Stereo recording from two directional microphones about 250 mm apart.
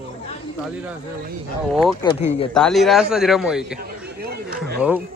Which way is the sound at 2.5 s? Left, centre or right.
Centre.